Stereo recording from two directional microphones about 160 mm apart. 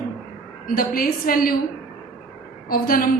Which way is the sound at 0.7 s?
65° left (ahead or behind).